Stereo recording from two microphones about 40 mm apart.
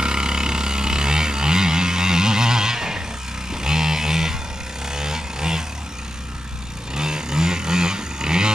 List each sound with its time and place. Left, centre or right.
0.0 s vehicle: centre
3.5 s a sound: centre
4.8 s vehicle: centre
6.9 s vehicle: centre